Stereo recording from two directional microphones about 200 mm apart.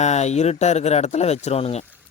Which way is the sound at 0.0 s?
35° left (ahead or behind).